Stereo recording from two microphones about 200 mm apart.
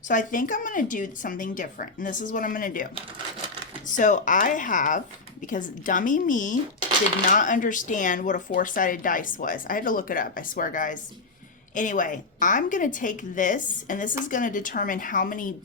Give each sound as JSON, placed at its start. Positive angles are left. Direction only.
{"t": 0.1, "sound": "a woman's voice", "side_deg": 40}
{"t": 3.9, "sound": "a woman's voice", "side_deg": 40}